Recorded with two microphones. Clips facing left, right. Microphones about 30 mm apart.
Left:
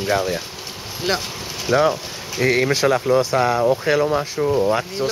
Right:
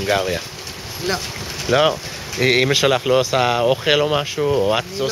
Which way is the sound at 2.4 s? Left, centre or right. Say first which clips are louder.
Right 2 dB; right.